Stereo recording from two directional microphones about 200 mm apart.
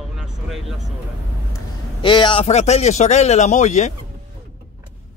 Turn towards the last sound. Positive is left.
turn(degrees=35)  # may be behind; listen again after turning